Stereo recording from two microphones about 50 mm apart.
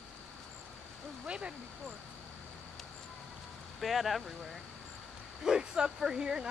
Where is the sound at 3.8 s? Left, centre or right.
Centre.